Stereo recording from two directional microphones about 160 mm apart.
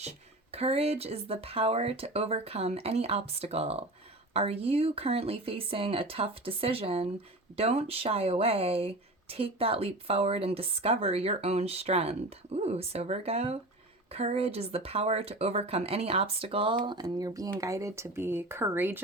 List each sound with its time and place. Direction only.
0.5 s speech: 40° right (ahead or behind); by 19.0 s 15° right (ahead or behind)